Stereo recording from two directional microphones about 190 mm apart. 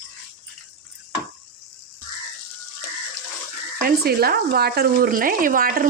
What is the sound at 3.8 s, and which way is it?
Speech, 55° right (ahead or behind).